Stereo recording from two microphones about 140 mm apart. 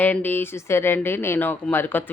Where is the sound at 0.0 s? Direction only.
15° left (ahead or behind).